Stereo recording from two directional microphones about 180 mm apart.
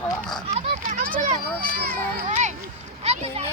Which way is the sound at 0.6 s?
40° right (ahead or behind).